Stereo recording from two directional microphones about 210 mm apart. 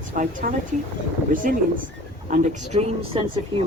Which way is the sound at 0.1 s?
40° right (ahead or behind).